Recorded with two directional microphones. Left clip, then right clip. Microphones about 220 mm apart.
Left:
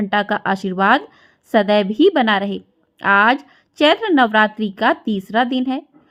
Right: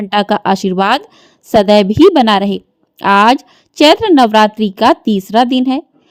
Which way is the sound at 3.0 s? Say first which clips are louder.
Right 5 dB; 40° right (ahead or behind).